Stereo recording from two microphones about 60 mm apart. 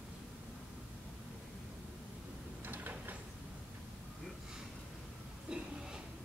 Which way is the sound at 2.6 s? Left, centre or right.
Right.